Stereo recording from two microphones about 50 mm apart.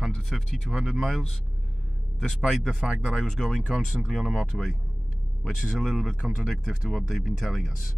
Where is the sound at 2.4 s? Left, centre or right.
Centre.